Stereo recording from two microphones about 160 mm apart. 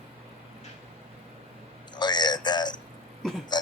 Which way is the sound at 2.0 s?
25° left (ahead or behind).